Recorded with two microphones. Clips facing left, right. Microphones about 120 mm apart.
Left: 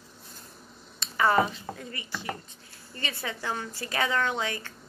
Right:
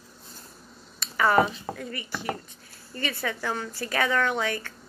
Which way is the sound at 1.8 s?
30° left (ahead or behind).